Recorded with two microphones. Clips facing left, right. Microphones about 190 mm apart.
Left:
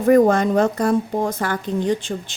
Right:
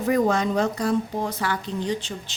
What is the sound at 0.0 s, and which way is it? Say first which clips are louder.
A woman's voice: left 7 dB; 50° left (ahead or behind).